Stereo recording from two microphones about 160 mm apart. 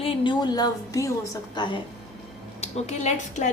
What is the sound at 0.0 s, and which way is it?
A woman's voice, 35° left (ahead or behind).